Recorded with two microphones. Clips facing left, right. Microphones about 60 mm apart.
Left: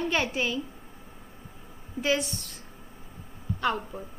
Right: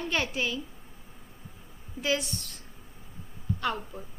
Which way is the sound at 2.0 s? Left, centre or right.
Centre.